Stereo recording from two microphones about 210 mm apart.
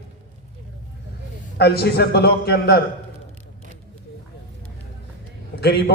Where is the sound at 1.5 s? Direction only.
50° left (ahead or behind).